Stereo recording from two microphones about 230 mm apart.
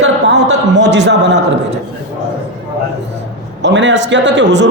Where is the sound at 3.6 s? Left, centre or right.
Right.